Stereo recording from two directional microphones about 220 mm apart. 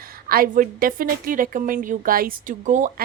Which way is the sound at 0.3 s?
40° right (ahead or behind).